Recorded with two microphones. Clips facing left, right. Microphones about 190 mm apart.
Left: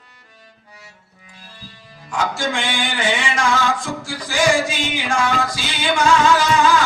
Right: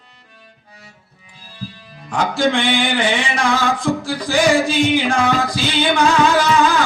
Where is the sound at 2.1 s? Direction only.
60° right (ahead or behind).